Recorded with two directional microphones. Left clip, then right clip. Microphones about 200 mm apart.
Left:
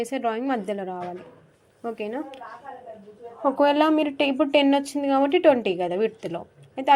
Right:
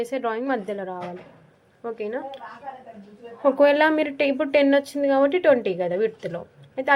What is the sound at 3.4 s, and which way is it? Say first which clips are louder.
A woman's voice: right 3 dB; 10° left (ahead or behind).